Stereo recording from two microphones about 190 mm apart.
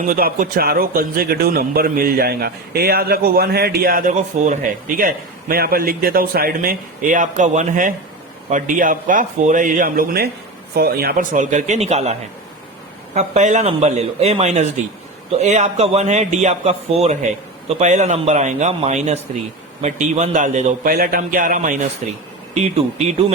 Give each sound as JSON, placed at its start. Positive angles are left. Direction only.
{"t": 0.0, "sound": "a man's voice", "side_deg": -50}
{"t": 13.1, "sound": "a man's voice", "side_deg": -40}